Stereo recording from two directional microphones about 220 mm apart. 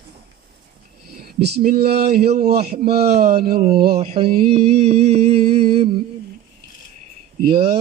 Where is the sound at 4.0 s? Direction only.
25° right (ahead or behind).